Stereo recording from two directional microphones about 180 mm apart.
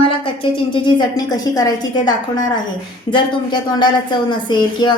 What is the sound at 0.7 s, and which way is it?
A woman's voice, 25° left (ahead or behind).